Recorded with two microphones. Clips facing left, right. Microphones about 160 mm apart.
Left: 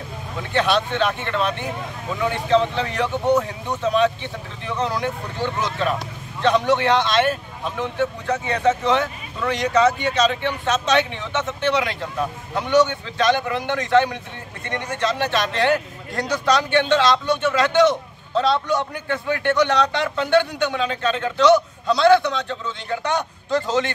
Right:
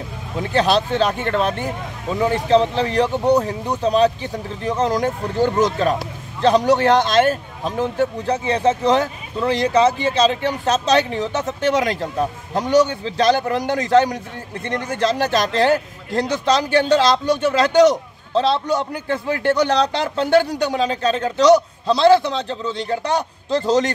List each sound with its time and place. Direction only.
0.4 s speech: 35° right (ahead or behind)